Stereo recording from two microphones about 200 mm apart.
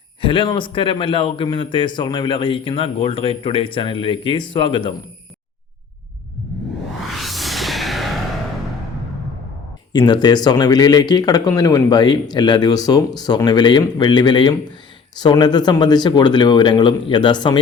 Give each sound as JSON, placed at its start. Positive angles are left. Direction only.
{"t": 0.2, "sound": "a man's voice", "side_deg": 25}
{"t": 7.1, "sound": "music", "side_deg": 0}
{"t": 9.9, "sound": "a man's voice", "side_deg": 20}